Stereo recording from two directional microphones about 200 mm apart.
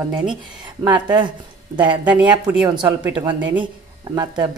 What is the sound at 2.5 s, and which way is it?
Speech, 10° right (ahead or behind).